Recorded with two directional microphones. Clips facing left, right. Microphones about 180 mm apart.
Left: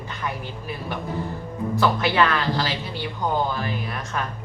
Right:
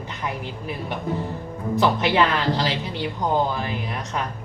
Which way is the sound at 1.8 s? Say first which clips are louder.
Right 1 dB; 20° right (ahead or behind).